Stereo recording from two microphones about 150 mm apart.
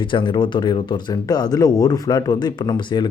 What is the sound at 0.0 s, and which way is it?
Speech, 35° left (ahead or behind).